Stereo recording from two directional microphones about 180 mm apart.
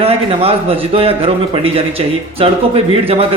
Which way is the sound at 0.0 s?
35° right (ahead or behind).